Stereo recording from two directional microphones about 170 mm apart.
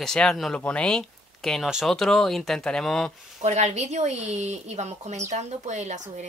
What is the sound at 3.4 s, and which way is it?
Speech, 40° right (ahead or behind).